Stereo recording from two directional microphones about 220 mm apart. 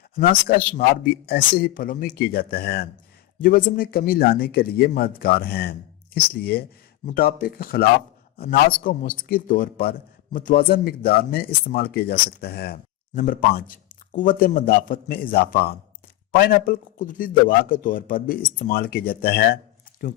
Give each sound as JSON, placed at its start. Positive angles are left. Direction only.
{"t": 0.2, "sound": "a man's voice", "side_deg": 40}